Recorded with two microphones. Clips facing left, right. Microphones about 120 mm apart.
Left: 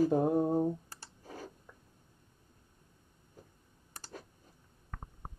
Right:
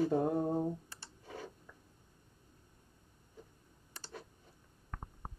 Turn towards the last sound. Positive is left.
turn(degrees=45)  # may be behind; listen again after turning